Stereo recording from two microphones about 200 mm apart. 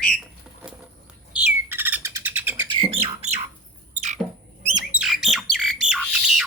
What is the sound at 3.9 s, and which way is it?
Rodents, 35° right (ahead or behind).